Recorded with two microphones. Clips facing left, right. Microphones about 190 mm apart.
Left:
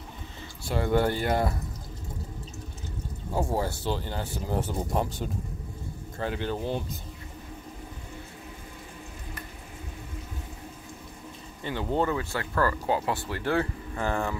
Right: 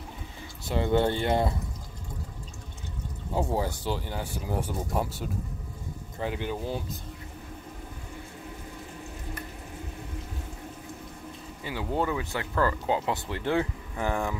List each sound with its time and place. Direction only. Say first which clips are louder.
0.7 s speech: even; 20° right (ahead or behind)
3.4 s speech: even; 15° right (ahead or behind)
6.1 s speech: left 1 dB; 15° right (ahead or behind)
11.6 s speech: left 2 dB; 5° right (ahead or behind)